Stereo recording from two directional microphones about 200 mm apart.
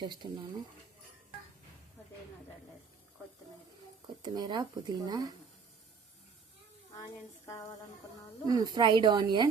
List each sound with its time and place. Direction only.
0.0 s speech: 25° right (ahead or behind)
4.0 s speech: 20° right (ahead or behind)
6.9 s a sound: 20° left (ahead or behind)
8.4 s speech: 20° right (ahead or behind)